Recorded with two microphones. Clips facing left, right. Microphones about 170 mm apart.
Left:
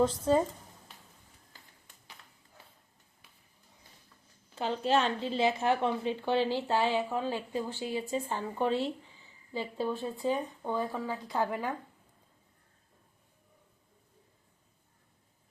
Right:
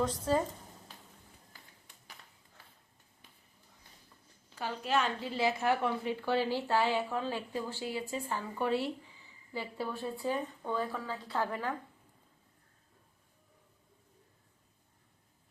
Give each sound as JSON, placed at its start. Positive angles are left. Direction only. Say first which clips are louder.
{"t": 0.0, "sound": "a woman's voice", "louder": "left 4 dB", "side_deg": 20}
{"t": 4.5, "sound": "a woman's voice", "louder": "left 4 dB", "side_deg": 25}